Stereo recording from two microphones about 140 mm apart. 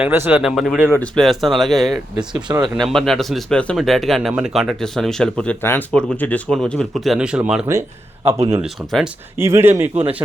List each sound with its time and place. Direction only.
0.0 s speech: 15° right (ahead or behind)
0.9 s a man's voice: 10° left (ahead or behind); by 7.6 s 5° right (ahead or behind)
8.3 s speech: 45° right (ahead or behind)
8.6 s a man's voice: centre (ahead or behind)
9.4 s speech: 20° right (ahead or behind)